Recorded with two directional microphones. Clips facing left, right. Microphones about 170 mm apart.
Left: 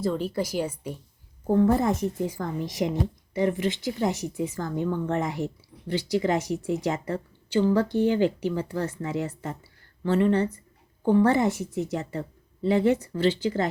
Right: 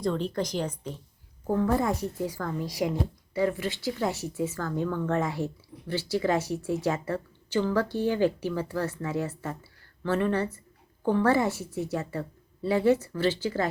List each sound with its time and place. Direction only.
0.0 s speech: 5° left (ahead or behind)
1.5 s a woman's voice: 25° left (ahead or behind)